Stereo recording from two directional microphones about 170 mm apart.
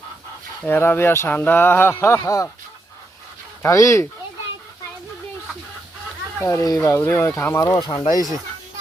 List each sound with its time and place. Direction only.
0.6 s speech: 10° left (ahead or behind)
3.6 s speech: 15° left (ahead or behind)
6.4 s speech: 20° left (ahead or behind)